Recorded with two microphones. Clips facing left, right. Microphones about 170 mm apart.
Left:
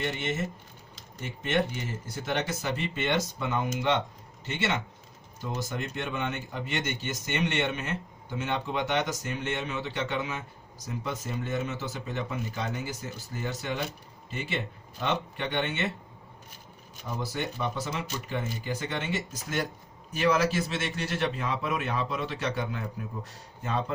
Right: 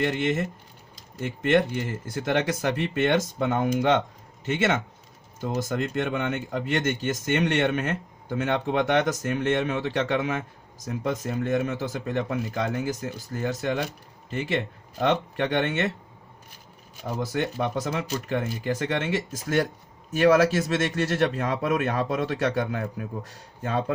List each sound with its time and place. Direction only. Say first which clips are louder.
0.0 s speech: right 7 dB; 60° right (ahead or behind)
2.0 s a man's voice: right 6 dB; 55° right (ahead or behind)
14.9 s a man's voice: right 7 dB; 50° right (ahead or behind)
17.0 s a man's voice: right 6 dB; 60° right (ahead or behind)